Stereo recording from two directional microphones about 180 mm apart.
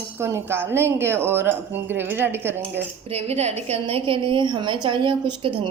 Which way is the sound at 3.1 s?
35° right (ahead or behind).